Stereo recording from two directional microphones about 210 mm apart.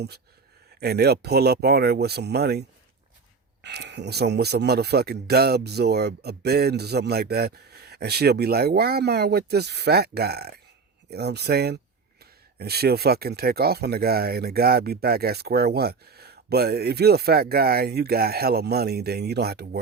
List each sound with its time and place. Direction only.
0.8 s speech: 50° right (ahead or behind)